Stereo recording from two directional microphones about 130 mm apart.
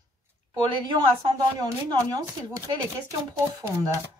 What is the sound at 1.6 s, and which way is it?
Speech, 30° right (ahead or behind).